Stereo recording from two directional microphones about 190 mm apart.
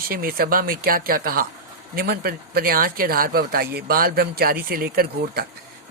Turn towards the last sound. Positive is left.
turn(degrees=-50)  # may be behind; listen again after turning